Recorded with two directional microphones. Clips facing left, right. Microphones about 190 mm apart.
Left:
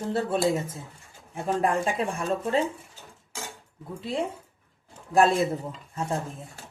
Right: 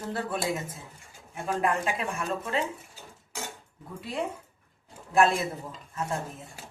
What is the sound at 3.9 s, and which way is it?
Speech, 25° left (ahead or behind).